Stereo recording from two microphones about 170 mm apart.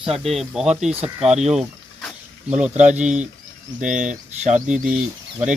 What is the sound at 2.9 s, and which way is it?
Speech, 5° right (ahead or behind).